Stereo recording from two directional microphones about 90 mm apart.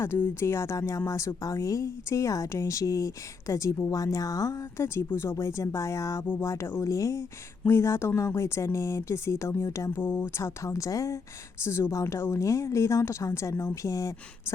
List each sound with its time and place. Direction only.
0.0 s speech: 25° left (ahead or behind)